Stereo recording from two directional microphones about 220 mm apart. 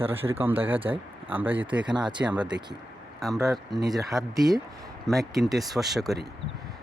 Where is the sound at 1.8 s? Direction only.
20° right (ahead or behind).